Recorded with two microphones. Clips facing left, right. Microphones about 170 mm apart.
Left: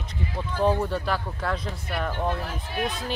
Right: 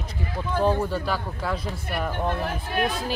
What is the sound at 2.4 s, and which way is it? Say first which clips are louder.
Speech: right 4 dB; 60° right (ahead or behind).